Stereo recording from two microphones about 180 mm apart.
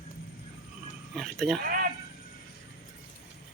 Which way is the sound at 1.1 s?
Centre (ahead or behind).